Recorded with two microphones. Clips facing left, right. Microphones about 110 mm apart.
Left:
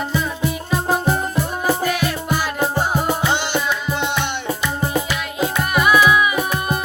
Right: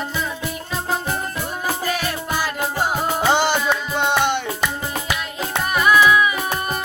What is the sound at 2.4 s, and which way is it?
Music, 15° left (ahead or behind).